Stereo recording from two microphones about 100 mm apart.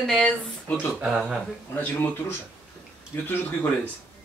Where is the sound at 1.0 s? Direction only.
5° right (ahead or behind).